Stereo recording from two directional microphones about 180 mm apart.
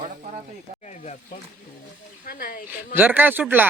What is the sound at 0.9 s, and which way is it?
Speech, 40° left (ahead or behind).